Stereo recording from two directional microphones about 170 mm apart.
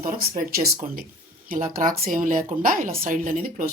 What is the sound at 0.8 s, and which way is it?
A woman's voice, 50° right (ahead or behind).